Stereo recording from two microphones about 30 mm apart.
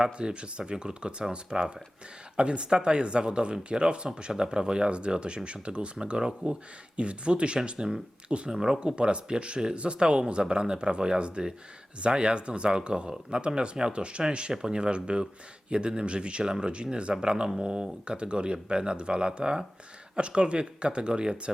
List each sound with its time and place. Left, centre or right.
0.0 s speech: right